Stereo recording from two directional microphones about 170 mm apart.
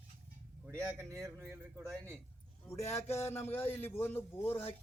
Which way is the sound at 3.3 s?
15° left (ahead or behind).